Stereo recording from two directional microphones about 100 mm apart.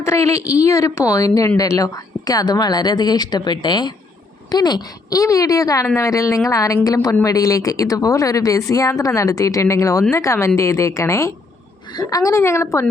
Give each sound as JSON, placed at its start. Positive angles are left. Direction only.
{"t": 0.0, "sound": "a woman's voice", "side_deg": 30}